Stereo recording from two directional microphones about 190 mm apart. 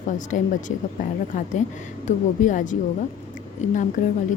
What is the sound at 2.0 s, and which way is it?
A woman's voice, 40° left (ahead or behind).